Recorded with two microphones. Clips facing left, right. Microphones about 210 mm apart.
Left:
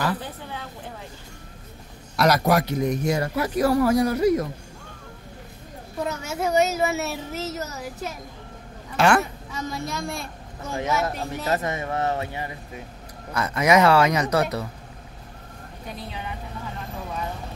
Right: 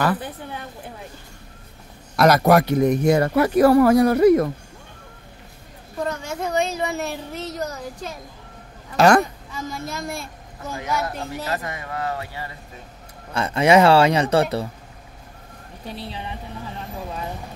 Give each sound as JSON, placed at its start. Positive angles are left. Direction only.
{"t": 0.2, "sound": "a woman's voice", "side_deg": -15}
{"t": 2.1, "sound": "a man's voice", "side_deg": -55}
{"t": 6.0, "sound": "speech", "side_deg": 10}
{"t": 8.9, "sound": "speech", "side_deg": -40}
{"t": 9.5, "sound": "speech", "side_deg": 0}
{"t": 10.7, "sound": "speech", "side_deg": 20}
{"t": 13.3, "sound": "speech", "side_deg": -30}
{"t": 15.9, "sound": "speech", "side_deg": -30}